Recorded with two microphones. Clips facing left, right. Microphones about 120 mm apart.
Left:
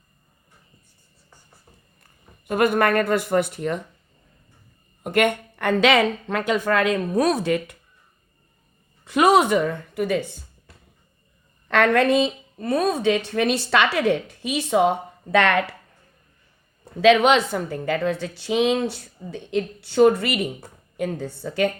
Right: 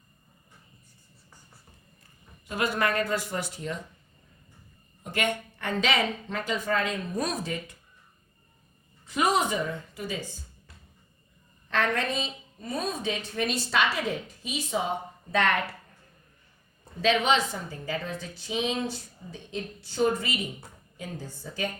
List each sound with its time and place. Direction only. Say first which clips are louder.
2.5 s speech: left 8 dB; 55° left (ahead or behind)
5.0 s a woman's voice: left 9 dB; 60° left (ahead or behind)
9.0 s speech: left 9 dB; 70° left (ahead or behind)
11.7 s a woman's voice: left 10 dB; 70° left (ahead or behind)
17.0 s a woman's voice: left 8 dB; 70° left (ahead or behind)